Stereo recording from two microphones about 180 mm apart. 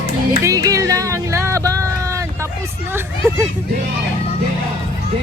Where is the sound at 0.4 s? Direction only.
20° right (ahead or behind).